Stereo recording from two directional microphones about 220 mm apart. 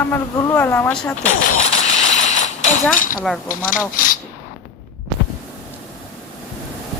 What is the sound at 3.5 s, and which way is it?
Speech, 40° left (ahead or behind).